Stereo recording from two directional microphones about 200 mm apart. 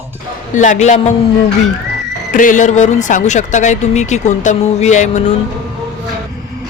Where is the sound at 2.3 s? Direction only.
40° left (ahead or behind).